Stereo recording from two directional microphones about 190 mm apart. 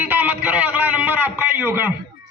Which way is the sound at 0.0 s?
10° right (ahead or behind).